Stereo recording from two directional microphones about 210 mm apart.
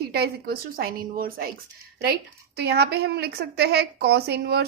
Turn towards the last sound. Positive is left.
turn(degrees=-50)  # may be behind; listen again after turning